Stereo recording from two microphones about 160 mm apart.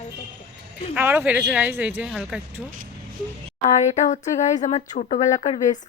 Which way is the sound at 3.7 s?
50° left (ahead or behind).